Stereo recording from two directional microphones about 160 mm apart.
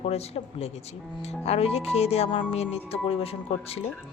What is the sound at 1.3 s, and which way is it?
A woman's voice, 40° left (ahead or behind).